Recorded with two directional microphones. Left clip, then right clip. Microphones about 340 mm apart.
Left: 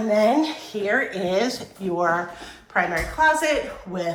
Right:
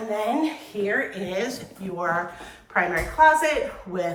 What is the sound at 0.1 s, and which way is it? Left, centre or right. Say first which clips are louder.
A woman's voice: left 6 dB; centre.